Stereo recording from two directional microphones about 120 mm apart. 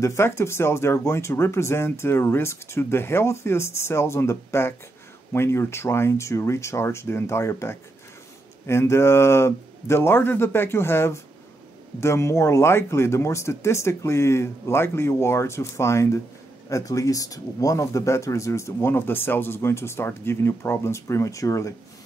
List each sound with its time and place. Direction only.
0.0 s speech: 25° left (ahead or behind)